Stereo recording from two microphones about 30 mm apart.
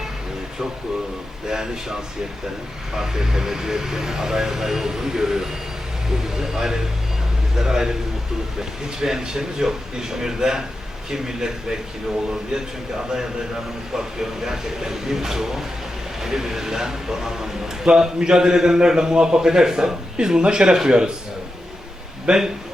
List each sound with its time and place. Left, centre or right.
1.5 s a man's voice: right
2.9 s a man's voice: centre
9.0 s a man's voice: centre
13.9 s a man's voice: centre
22.3 s a man's voice: right